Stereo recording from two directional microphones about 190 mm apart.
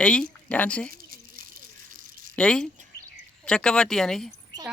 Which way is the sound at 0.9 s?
50° right (ahead or behind).